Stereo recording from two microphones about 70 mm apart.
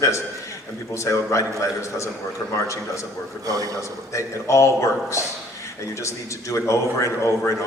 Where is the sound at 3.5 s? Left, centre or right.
Right.